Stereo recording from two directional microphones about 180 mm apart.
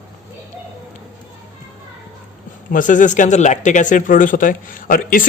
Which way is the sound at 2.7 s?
45° left (ahead or behind).